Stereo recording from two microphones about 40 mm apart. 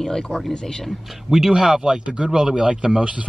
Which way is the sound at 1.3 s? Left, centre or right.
Centre.